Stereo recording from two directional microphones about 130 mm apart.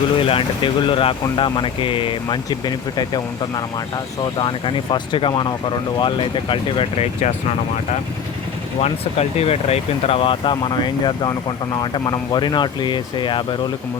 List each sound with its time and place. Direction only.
0.2 s speech: 45° left (ahead or behind)
8.8 s speech: 50° left (ahead or behind)